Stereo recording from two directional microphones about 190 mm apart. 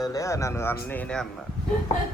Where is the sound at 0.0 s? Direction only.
20° left (ahead or behind).